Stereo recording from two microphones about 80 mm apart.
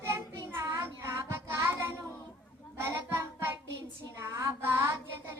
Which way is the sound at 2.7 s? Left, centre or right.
Right.